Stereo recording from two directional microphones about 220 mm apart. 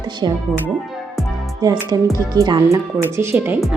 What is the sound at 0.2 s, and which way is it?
Speech, 20° right (ahead or behind).